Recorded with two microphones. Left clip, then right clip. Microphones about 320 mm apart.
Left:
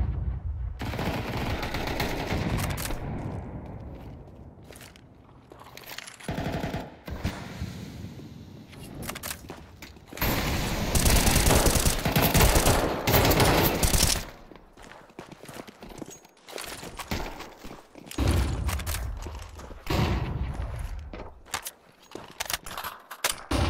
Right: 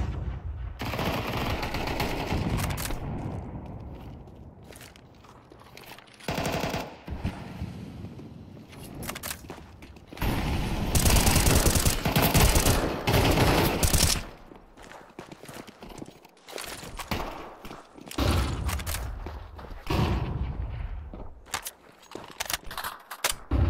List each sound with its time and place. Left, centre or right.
0.0 s gunshot: right
0.7 s machine gun: centre
6.2 s machine gun: centre
7.1 s a sound: centre
8.8 s vehicle: centre
10.1 s mechanisms: centre
10.9 s fusillade: centre
11.6 s machine gun: centre
14.9 s clip-clop: centre
18.3 s a sound: centre